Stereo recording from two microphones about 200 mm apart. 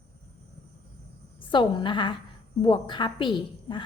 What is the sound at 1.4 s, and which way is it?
A woman's voice, 25° left (ahead or behind).